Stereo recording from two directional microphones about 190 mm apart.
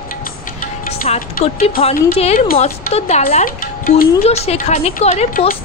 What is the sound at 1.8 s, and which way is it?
Speech, 30° left (ahead or behind).